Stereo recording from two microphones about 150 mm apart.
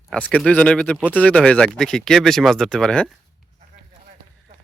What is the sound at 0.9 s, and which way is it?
Speech, 10° right (ahead or behind).